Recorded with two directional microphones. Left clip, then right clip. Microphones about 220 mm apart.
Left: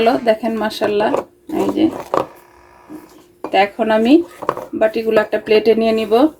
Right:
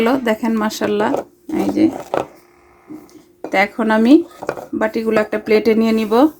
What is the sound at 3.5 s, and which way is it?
Speech, 40° right (ahead or behind).